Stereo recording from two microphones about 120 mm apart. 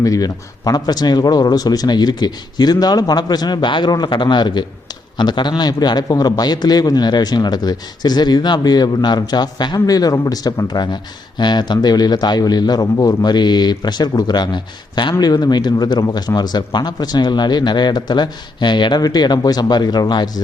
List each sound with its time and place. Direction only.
0.0 s a man's voice: 30° left (ahead or behind)